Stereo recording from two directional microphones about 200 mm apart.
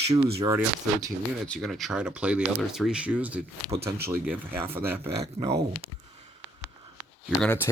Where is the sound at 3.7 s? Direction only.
25° right (ahead or behind).